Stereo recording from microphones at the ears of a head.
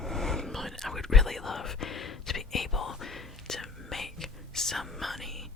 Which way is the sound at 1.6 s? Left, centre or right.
Left.